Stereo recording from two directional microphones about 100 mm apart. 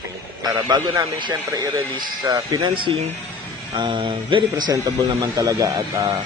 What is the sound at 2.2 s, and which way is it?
Speech, 45° right (ahead or behind).